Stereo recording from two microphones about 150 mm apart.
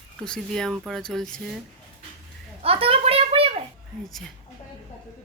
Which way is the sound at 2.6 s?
40° right (ahead or behind).